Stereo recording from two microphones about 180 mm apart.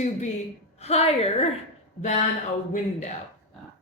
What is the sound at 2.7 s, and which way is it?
Speech, 40° left (ahead or behind).